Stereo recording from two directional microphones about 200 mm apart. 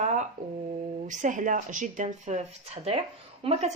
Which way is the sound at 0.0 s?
35° right (ahead or behind).